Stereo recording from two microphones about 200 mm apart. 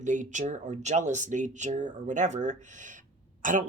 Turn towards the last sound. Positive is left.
turn(degrees=-40)  # may be behind; listen again after turning